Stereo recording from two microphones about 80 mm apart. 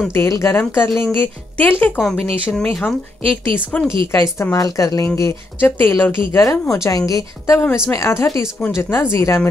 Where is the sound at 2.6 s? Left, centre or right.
Left.